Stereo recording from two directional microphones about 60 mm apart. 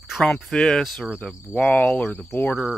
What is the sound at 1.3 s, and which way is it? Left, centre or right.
Speech, centre.